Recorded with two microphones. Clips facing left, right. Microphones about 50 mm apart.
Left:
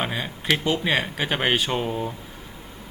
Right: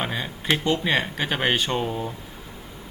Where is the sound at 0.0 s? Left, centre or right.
Centre.